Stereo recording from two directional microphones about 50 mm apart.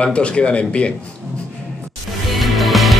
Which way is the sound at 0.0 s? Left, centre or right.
Left.